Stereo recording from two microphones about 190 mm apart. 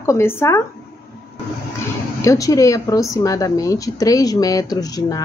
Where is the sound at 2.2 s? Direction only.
15° left (ahead or behind).